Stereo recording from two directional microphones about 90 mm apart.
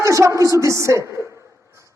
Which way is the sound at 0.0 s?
35° right (ahead or behind).